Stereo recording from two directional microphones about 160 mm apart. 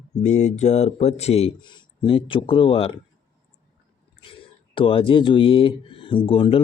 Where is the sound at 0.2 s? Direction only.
45° left (ahead or behind).